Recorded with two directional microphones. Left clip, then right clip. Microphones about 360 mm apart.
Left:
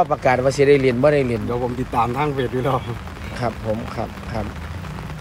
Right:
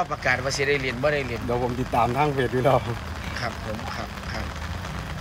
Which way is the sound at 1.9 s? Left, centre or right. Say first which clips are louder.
Left 1 dB; centre.